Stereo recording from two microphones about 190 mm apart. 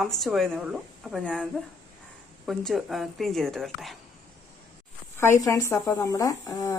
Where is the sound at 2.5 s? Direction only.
Centre (ahead or behind).